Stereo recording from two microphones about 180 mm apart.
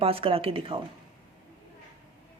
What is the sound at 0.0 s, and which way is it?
Speech, 30° right (ahead or behind).